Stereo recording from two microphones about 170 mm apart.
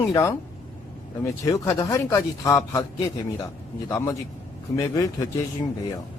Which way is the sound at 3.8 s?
20° left (ahead or behind).